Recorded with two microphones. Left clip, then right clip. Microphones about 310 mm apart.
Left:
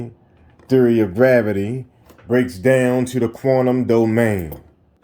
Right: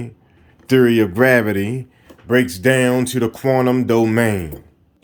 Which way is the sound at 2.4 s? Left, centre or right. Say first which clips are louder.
Even; centre.